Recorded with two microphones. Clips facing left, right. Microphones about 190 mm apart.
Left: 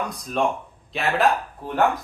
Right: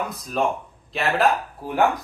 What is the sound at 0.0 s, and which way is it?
Speech, centre (ahead or behind).